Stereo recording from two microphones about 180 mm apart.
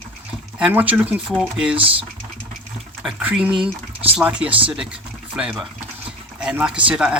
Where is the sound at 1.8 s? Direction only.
30° right (ahead or behind).